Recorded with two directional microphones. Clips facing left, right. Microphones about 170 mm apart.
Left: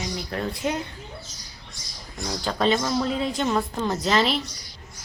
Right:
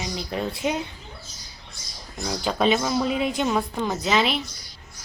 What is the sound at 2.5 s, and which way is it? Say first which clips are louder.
Speech: right 1 dB; 15° right (ahead or behind).